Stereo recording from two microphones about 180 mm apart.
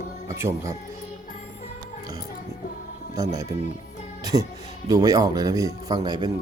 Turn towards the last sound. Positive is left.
turn(degrees=-25)  # may be behind; listen again after turning